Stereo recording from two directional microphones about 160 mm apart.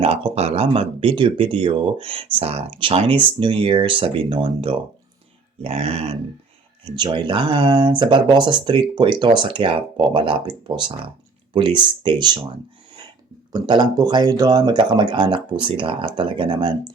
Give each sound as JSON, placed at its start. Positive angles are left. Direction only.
{"t": 0.0, "sound": "speech", "side_deg": -35}
{"t": 6.9, "sound": "speech", "side_deg": -30}
{"t": 13.5, "sound": "speech", "side_deg": -25}